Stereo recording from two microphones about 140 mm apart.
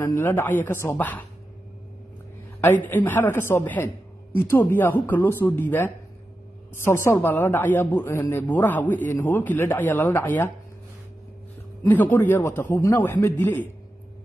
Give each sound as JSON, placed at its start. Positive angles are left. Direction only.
{"t": 0.0, "sound": "a man's voice", "side_deg": 15}
{"t": 2.6, "sound": "a man's voice", "side_deg": 15}
{"t": 11.9, "sound": "a man's voice", "side_deg": 15}